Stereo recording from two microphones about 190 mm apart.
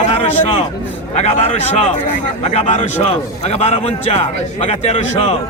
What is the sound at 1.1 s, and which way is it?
A man's voice, 35° left (ahead or behind).